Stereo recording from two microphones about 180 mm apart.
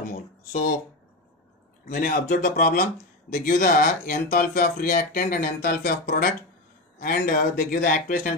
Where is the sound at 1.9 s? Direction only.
50° left (ahead or behind).